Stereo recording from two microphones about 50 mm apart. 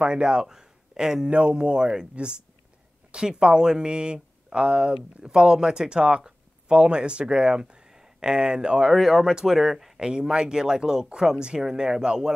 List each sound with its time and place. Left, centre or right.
0.0 s speech: centre